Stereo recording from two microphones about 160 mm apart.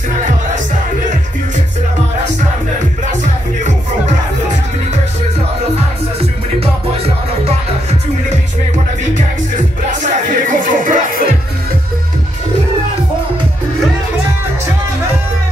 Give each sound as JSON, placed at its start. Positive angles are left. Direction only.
{"t": 9.1, "sound": "music", "side_deg": -50}